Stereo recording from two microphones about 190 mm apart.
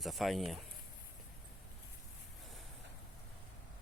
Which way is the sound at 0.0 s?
Centre (ahead or behind).